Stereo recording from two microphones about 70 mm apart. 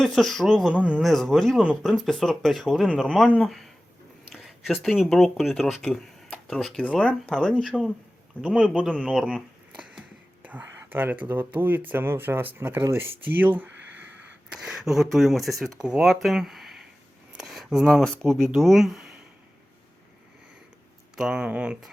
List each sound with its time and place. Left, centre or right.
0.0 s speech: centre
0.7 s speech: centre
1.0 s speech: centre
4.4 s a sound: centre
5.0 s speech: centre
5.9 s cash register: centre
7.0 s speech: centre
8.4 s speech: centre
10.4 s speech: right
14.5 s speech: centre
17.3 s a sound: centre
18.2 s speech: centre
21.2 s speech: centre